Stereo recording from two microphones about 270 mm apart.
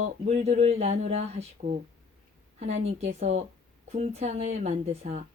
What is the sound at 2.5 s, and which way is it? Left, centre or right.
A woman's voice, right.